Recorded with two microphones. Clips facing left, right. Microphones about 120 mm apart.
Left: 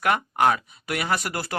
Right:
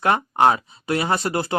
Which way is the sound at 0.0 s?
30° right (ahead or behind).